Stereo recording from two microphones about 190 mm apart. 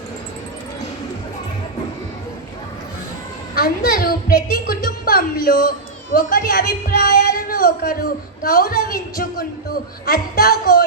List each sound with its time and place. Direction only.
3.5 s a woman's voice: 50° left (ahead or behind)